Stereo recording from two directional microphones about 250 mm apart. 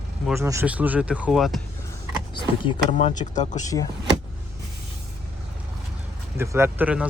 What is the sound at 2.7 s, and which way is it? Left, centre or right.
Speech, left.